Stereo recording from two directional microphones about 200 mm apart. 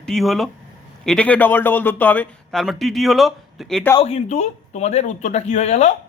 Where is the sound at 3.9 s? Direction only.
30° left (ahead or behind).